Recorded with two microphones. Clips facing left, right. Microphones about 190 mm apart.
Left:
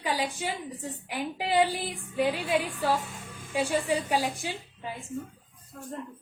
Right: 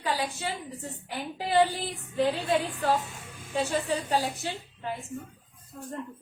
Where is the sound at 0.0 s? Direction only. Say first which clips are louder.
Even; 15° left (ahead or behind).